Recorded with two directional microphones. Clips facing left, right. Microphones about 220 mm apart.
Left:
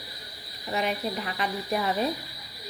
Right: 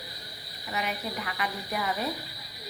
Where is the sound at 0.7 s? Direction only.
30° left (ahead or behind).